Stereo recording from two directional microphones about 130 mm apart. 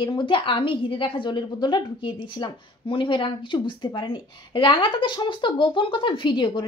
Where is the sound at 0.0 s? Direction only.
40° left (ahead or behind).